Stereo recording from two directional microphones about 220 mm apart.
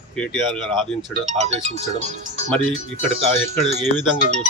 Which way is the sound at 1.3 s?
30° right (ahead or behind).